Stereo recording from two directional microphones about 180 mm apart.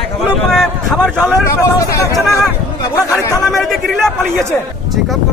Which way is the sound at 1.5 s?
15° left (ahead or behind).